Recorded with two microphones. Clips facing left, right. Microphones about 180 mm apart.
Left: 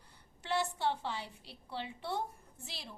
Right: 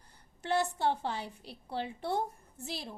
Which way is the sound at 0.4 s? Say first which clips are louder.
Right 4 dB; 45° right (ahead or behind).